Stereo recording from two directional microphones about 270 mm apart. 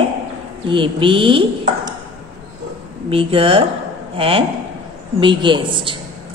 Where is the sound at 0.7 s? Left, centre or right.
Centre.